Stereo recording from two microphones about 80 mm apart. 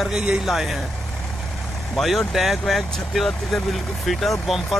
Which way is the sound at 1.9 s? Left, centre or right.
Centre.